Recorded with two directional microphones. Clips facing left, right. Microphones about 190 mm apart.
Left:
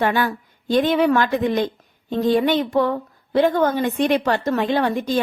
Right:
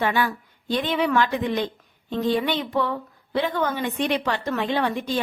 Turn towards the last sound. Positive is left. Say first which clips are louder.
# left 4 dB
turn(degrees=45)  # may be behind; listen again after turning